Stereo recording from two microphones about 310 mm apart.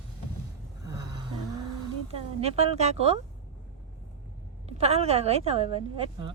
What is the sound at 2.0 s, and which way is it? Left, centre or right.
A woman's voice, centre.